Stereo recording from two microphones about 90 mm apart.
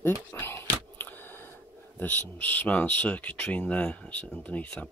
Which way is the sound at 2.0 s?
20° left (ahead or behind).